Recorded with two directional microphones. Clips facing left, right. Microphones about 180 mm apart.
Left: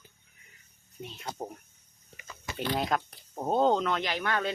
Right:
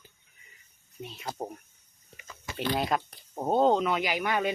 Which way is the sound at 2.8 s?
5° right (ahead or behind).